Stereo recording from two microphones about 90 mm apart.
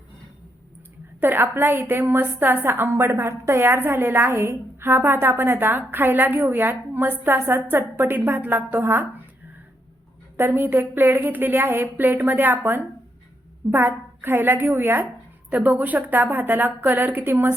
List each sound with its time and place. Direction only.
1.2 s a woman's voice: 25° right (ahead or behind)
10.3 s a woman's voice: 25° right (ahead or behind)